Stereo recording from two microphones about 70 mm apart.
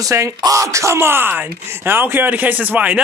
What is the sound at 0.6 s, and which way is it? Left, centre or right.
Speech, right.